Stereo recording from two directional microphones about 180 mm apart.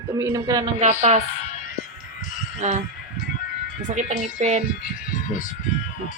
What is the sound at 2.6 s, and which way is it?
Music, 40° right (ahead or behind).